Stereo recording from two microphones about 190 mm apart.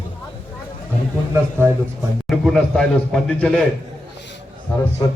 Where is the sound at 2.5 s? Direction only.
5° left (ahead or behind).